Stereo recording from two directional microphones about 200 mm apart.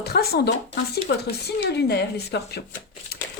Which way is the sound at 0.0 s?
50° left (ahead or behind).